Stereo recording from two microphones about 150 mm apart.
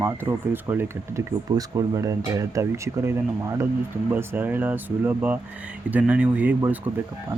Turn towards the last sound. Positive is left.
turn(degrees=-10)  # may be behind; listen again after turning